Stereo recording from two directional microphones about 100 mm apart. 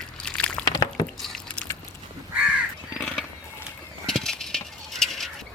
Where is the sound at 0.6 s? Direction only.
50° left (ahead or behind).